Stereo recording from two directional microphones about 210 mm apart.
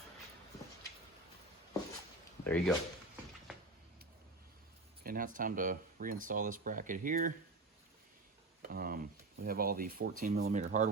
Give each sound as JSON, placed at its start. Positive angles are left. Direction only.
{"t": 2.4, "sound": "speech", "side_deg": 5}
{"t": 5.0, "sound": "speech", "side_deg": -40}
{"t": 8.6, "sound": "speech", "side_deg": -45}